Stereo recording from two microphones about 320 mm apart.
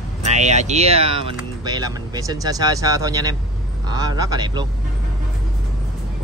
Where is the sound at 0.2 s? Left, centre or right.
Right.